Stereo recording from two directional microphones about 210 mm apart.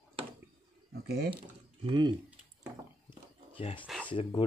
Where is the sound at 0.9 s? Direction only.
50° right (ahead or behind).